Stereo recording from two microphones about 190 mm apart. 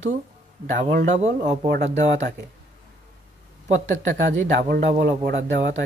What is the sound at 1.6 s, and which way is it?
Speech, 60° right (ahead or behind).